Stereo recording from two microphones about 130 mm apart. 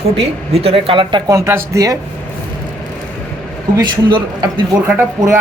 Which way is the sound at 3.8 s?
35° right (ahead or behind).